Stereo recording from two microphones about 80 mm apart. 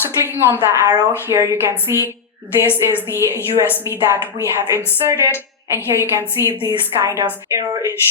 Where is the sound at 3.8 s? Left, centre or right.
Right.